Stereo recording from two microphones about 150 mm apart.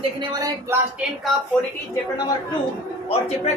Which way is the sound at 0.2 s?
25° right (ahead or behind).